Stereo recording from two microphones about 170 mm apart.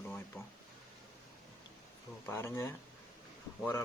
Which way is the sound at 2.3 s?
15° left (ahead or behind).